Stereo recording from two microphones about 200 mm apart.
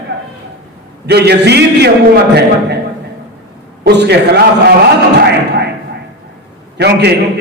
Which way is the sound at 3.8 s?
55° right (ahead or behind).